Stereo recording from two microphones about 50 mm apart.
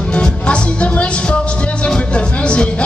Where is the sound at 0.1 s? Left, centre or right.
Left.